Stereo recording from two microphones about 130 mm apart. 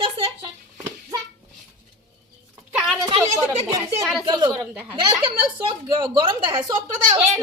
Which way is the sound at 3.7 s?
25° right (ahead or behind).